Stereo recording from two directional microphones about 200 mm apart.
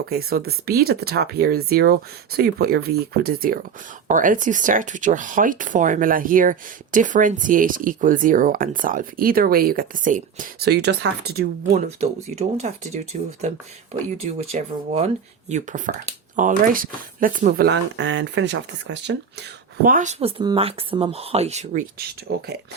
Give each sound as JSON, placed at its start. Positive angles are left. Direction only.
{"t": 0.1, "sound": "speech", "side_deg": -50}
{"t": 11.7, "sound": "speech", "side_deg": -35}
{"t": 14.2, "sound": "speech", "side_deg": -30}
{"t": 17.9, "sound": "speech", "side_deg": -65}
{"t": 19.8, "sound": "speech", "side_deg": -40}